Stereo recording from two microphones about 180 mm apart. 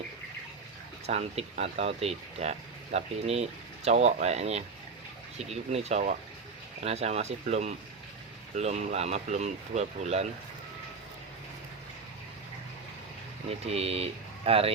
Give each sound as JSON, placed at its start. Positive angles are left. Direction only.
{"t": 1.0, "sound": "speech", "side_deg": -35}
{"t": 13.5, "sound": "speech", "side_deg": -35}